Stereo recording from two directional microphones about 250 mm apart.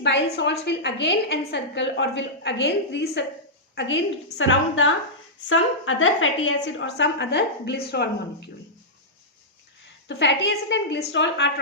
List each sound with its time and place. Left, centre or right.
0.3 s a woman's voice: left
10.1 s a woman's voice: left